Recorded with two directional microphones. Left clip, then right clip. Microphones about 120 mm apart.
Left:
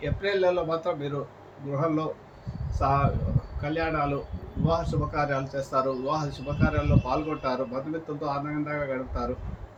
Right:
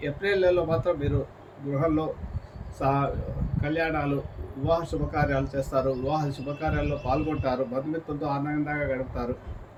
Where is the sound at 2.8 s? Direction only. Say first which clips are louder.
Left 1 dB; 15° right (ahead or behind).